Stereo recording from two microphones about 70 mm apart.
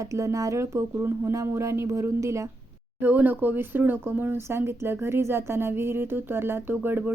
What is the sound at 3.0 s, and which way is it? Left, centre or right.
Speech, right.